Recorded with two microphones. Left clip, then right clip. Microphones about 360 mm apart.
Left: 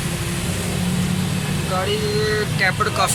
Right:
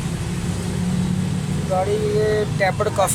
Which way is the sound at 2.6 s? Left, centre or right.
Centre.